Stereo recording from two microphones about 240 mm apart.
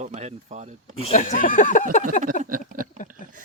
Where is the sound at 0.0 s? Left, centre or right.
Right.